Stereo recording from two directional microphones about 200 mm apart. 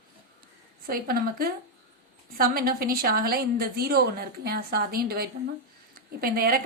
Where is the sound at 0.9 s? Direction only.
50° right (ahead or behind).